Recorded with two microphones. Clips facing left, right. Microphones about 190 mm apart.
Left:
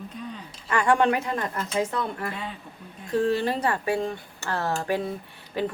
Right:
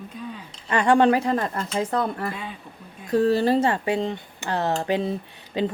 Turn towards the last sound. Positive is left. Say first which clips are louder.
# right 3 dB
turn(degrees=-25)  # may be behind; listen again after turning